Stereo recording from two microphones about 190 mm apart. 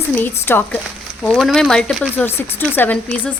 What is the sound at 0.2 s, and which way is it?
A woman's voice, 10° left (ahead or behind).